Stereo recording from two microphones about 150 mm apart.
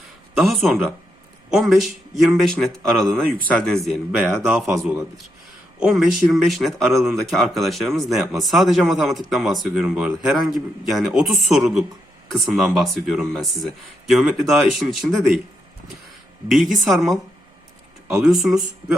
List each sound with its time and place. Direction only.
0.3 s speech: centre (ahead or behind)
4.2 s speech: 15° right (ahead or behind)
4.4 s speech: 5° right (ahead or behind)
16.5 s speech: centre (ahead or behind)
18.2 s speech: centre (ahead or behind)